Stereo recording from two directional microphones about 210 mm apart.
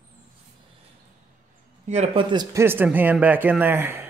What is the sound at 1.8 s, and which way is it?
Speech, 30° right (ahead or behind).